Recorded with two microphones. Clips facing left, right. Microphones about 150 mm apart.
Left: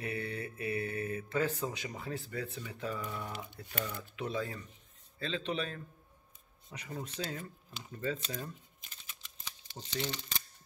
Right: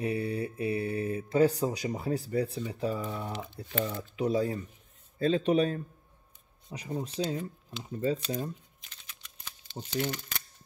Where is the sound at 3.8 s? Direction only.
15° right (ahead or behind).